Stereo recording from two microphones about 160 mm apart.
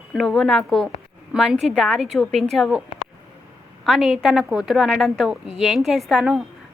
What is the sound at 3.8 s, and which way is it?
A woman's voice, centre (ahead or behind).